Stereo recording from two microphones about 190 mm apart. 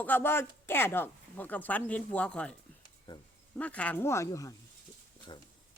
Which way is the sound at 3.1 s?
25° left (ahead or behind).